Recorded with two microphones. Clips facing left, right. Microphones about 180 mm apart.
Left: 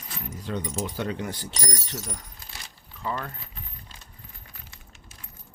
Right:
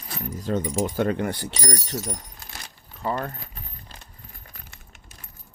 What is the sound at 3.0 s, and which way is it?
Speech, 45° right (ahead or behind).